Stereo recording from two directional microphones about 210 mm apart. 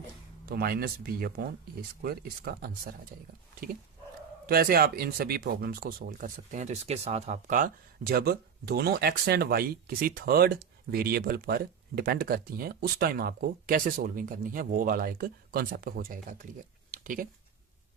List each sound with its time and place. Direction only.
0.4 s speech: 45° right (ahead or behind)
4.4 s speech: 45° right (ahead or behind)
16.9 s a sound: 40° right (ahead or behind)